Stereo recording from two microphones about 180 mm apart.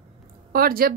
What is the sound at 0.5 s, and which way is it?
Speech, 55° right (ahead or behind).